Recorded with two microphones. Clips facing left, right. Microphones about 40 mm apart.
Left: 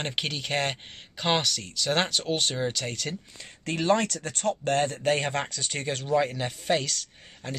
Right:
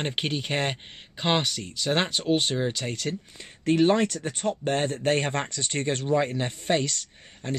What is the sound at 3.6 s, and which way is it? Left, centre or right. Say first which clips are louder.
Speech: right 4 dB; right.